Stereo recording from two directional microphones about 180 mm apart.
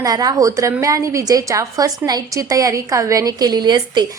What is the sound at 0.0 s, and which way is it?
A woman's voice, 20° right (ahead or behind).